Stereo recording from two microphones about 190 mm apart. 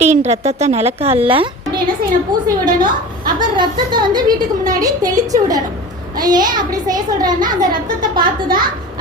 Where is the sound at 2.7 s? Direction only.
20° right (ahead or behind).